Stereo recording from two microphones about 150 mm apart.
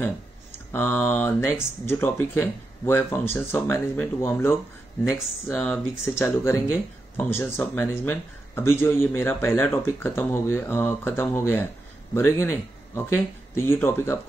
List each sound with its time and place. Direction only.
0.7 s a man's voice: 15° left (ahead or behind)